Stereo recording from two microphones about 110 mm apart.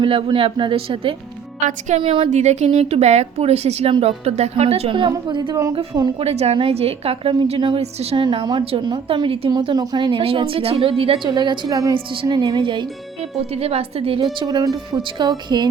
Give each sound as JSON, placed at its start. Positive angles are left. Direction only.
{"t": 0.0, "sound": "a woman's voice", "side_deg": -50}
{"t": 2.3, "sound": "a woman's voice", "side_deg": -90}
{"t": 4.9, "sound": "a woman's voice", "side_deg": -45}
{"t": 6.1, "sound": "a woman's voice", "side_deg": -70}
{"t": 8.1, "sound": "a woman's voice", "side_deg": -45}
{"t": 9.5, "sound": "a woman's voice", "side_deg": -40}
{"t": 11.3, "sound": "speech", "side_deg": -40}
{"t": 11.9, "sound": "a woman's voice", "side_deg": -50}
{"t": 12.4, "sound": "speech", "side_deg": -40}
{"t": 13.3, "sound": "a woman's voice", "side_deg": -65}
{"t": 14.4, "sound": "speech", "side_deg": -35}